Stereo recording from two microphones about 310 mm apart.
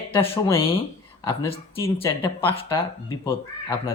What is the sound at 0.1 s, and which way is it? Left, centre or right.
Speech, centre.